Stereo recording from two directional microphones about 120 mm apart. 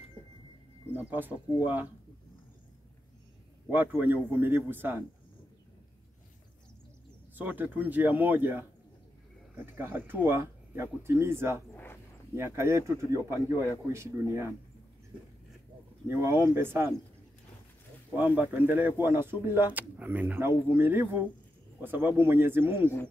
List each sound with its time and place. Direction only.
0.9 s speech: 15° right (ahead or behind)
3.7 s speech: 15° right (ahead or behind)
7.3 s speech: 15° right (ahead or behind)
9.8 s speech: 20° right (ahead or behind)
11.7 s a sound: 20° left (ahead or behind)
12.4 s speech: 20° right (ahead or behind)
16.1 s speech: 20° right (ahead or behind)
18.1 s speech: 15° right (ahead or behind)